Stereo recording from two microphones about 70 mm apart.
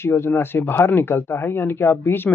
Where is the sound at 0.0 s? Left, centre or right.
Left.